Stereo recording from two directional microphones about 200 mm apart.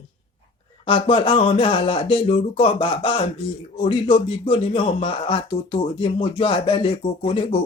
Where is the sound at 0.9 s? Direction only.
25° left (ahead or behind).